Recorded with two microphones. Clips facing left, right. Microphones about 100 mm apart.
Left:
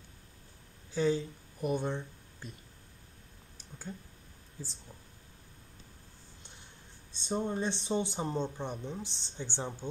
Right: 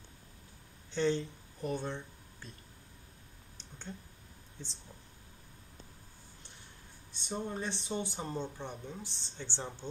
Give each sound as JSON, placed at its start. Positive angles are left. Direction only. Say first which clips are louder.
{"t": 0.9, "sound": "speech", "louder": "left 2 dB", "side_deg": 5}
{"t": 1.7, "sound": "speech", "louder": "left 4 dB", "side_deg": 15}
{"t": 3.5, "sound": "a sound", "louder": "left 3 dB", "side_deg": 5}
{"t": 4.6, "sound": "speech", "louder": "left 3 dB", "side_deg": 5}
{"t": 7.2, "sound": "speech", "louder": "left 5 dB", "side_deg": 25}